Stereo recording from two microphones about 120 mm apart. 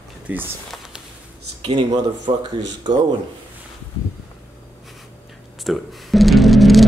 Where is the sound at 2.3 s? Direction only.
45° right (ahead or behind).